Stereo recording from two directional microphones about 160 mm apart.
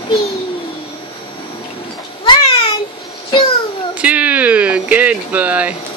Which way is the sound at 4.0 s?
10° right (ahead or behind).